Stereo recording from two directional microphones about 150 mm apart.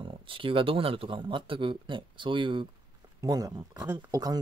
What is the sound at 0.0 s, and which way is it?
Speech, 35° right (ahead or behind).